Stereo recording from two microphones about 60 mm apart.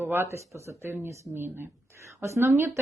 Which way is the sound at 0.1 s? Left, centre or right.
Right.